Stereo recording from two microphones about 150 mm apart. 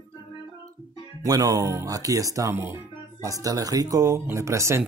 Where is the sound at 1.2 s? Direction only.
25° right (ahead or behind).